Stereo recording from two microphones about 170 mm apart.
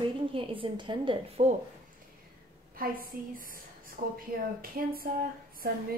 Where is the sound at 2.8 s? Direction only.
55° right (ahead or behind).